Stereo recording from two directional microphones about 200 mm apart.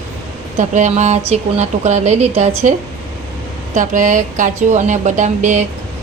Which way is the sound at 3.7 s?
40° right (ahead or behind).